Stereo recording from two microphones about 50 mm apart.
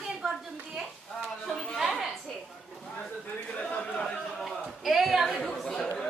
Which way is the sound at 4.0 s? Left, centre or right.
Centre.